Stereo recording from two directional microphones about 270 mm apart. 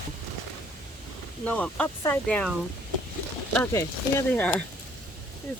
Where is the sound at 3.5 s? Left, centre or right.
Centre.